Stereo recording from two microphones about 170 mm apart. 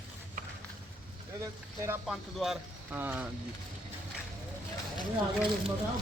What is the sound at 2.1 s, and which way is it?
Speech, centre (ahead or behind).